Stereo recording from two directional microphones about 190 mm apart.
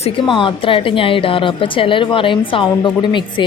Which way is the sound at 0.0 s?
25° left (ahead or behind).